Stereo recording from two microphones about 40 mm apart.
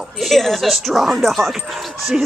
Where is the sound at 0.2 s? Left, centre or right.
Centre.